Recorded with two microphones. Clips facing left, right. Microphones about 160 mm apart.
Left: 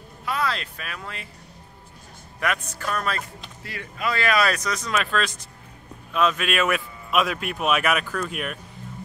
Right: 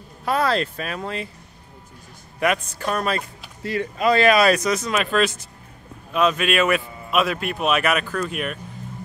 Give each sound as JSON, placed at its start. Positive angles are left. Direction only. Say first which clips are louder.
{"t": 0.2, "sound": "speech", "louder": "right 6 dB", "side_deg": -45}
{"t": 2.4, "sound": "speech", "louder": "right 5 dB", "side_deg": -25}
{"t": 4.7, "sound": "a man's voice", "louder": "right 4 dB", "side_deg": -5}